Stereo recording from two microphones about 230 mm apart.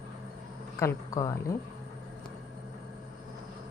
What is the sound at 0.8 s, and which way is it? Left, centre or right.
Speech, centre.